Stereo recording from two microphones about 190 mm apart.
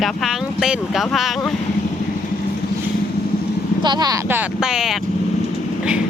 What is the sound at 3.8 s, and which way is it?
Speech, 20° right (ahead or behind).